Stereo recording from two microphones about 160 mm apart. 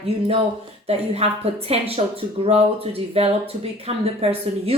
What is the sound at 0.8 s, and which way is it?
Speech, 40° right (ahead or behind).